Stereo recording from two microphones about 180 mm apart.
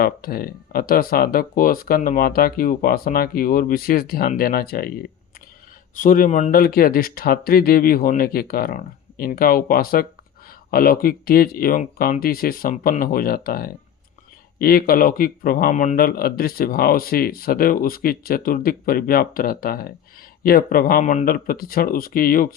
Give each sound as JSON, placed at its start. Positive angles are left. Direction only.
{"t": 0.0, "sound": "a man's voice", "side_deg": 55}
{"t": 6.0, "sound": "a man's voice", "side_deg": 45}
{"t": 21.0, "sound": "speech", "side_deg": 45}